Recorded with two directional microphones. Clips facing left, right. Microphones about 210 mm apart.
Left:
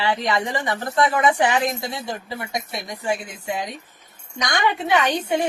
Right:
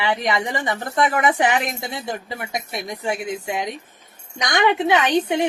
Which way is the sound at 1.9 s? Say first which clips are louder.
Right 1 dB; 20° right (ahead or behind).